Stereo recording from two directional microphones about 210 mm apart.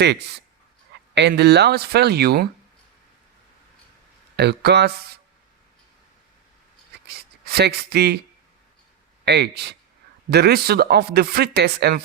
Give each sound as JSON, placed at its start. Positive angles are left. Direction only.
{"t": 0.0, "sound": "speech", "side_deg": -50}
{"t": 4.4, "sound": "speech", "side_deg": -50}
{"t": 7.1, "sound": "a sound", "side_deg": -50}
{"t": 9.2, "sound": "speech", "side_deg": -50}